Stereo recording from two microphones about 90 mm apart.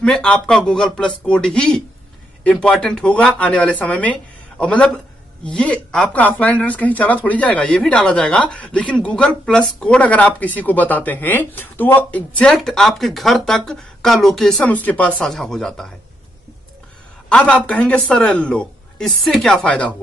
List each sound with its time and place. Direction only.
0.0 s speech: 10° left (ahead or behind)
14.6 s speech: 20° left (ahead or behind)
15.2 s speech: 5° left (ahead or behind)
17.3 s speech: 10° left (ahead or behind)